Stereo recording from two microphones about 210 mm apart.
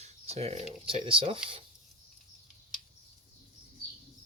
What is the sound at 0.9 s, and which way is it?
Speech, 25° right (ahead or behind).